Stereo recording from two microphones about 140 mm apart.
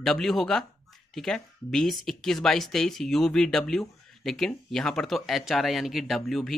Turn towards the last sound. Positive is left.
turn(degrees=0)  # may be behind; listen again after turning